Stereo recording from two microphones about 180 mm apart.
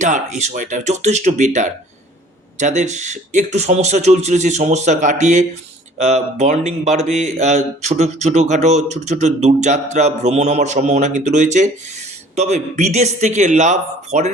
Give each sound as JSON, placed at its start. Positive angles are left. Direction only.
{"t": 0.0, "sound": "a man's voice", "side_deg": -40}